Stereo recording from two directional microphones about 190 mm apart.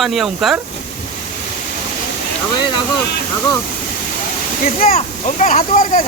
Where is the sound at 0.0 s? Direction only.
Centre (ahead or behind).